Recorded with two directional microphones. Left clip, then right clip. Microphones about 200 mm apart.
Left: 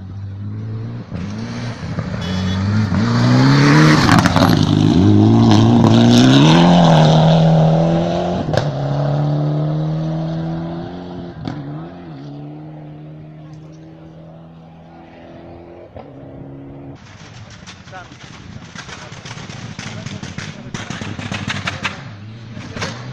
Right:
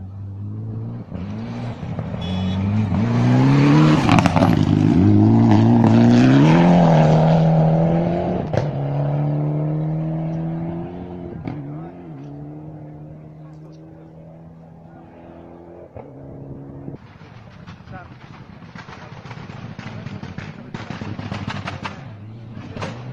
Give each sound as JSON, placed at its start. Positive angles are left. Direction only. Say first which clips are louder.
{"t": 1.3, "sound": "vehicle", "louder": "left 3 dB", "side_deg": 10}
{"t": 3.6, "sound": "vehicle", "louder": "left 5 dB", "side_deg": 20}
{"t": 19.8, "sound": "vehicle", "louder": "left 6 dB", "side_deg": 50}